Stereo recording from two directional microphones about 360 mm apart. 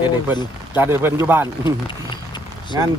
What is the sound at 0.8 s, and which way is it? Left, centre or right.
Speech, centre.